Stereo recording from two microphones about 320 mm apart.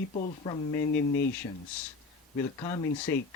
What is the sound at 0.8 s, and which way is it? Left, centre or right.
Speech, left.